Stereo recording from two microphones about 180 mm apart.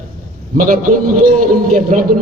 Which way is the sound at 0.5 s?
50° right (ahead or behind).